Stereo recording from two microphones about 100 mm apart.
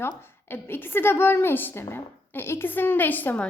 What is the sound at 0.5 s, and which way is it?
Speech, 20° left (ahead or behind).